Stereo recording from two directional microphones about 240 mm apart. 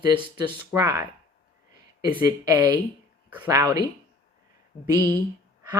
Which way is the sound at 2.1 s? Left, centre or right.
Centre.